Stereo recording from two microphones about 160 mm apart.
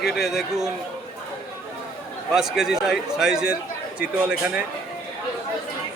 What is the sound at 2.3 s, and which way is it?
Speech, 5° right (ahead or behind).